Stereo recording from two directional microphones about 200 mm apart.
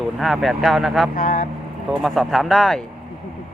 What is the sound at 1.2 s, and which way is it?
Speech, 45° left (ahead or behind).